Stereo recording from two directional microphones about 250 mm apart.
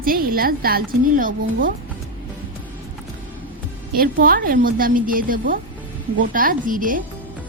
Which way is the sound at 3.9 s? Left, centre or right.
Right.